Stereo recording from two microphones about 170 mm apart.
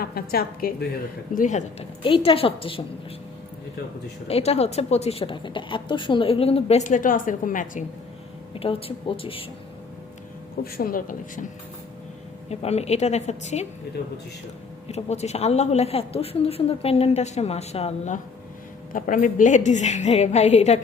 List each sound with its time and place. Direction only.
0.0 s speech: 60° left (ahead or behind)
1.4 s a woman's voice: 45° left (ahead or behind)
2.0 s a woman's voice: 30° left (ahead or behind)
4.3 s a woman's voice: 35° left (ahead or behind)
8.5 s a woman's voice: 35° left (ahead or behind)
10.6 s speech: 60° left (ahead or behind)
12.5 s a woman's voice: 40° left (ahead or behind)
14.8 s a woman's voice: 40° left (ahead or behind)